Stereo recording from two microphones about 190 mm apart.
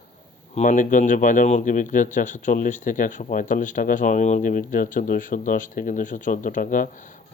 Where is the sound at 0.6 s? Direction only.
40° left (ahead or behind).